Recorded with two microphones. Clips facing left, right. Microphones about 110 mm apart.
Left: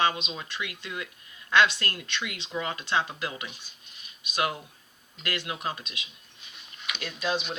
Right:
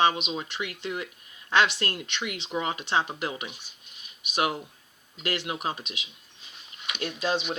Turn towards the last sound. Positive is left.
turn(degrees=-30)  # may be behind; listen again after turning